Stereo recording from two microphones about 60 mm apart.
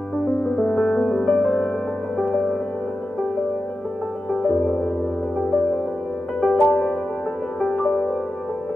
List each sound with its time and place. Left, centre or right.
0.6 s music: centre
4.3 s music: left
6.4 s music: centre